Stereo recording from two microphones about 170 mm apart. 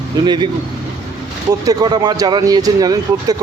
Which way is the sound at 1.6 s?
20° right (ahead or behind).